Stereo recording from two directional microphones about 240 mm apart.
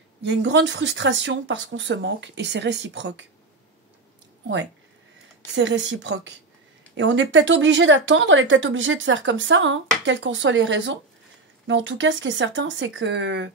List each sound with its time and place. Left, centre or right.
0.2 s speech: right
5.5 s speech: right